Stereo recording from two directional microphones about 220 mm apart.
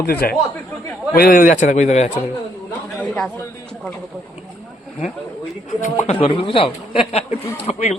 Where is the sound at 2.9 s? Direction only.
5° left (ahead or behind).